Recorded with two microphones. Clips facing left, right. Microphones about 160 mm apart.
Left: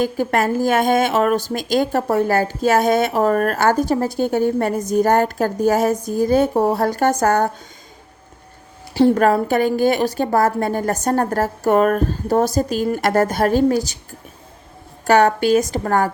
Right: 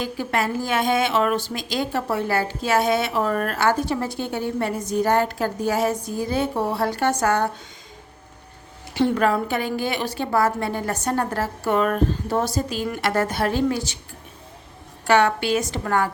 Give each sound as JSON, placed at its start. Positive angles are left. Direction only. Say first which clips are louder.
{"t": 0.0, "sound": "a woman's voice", "louder": "left 6 dB", "side_deg": 50}
{"t": 9.0, "sound": "a woman's voice", "louder": "left 6 dB", "side_deg": 40}
{"t": 15.0, "sound": "a woman's voice", "louder": "left 4 dB", "side_deg": 40}